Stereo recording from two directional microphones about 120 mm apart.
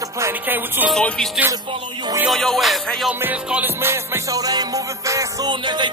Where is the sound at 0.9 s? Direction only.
5° left (ahead or behind).